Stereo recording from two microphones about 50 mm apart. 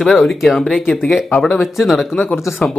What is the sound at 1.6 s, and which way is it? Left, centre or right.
Speech, centre.